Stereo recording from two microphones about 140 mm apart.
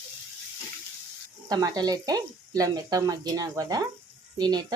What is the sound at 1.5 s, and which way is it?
Speech, 25° right (ahead or behind).